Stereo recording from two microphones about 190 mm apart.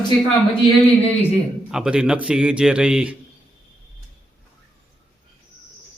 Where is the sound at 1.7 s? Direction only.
5° right (ahead or behind).